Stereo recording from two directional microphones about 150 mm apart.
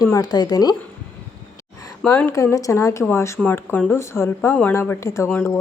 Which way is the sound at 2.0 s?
15° left (ahead or behind).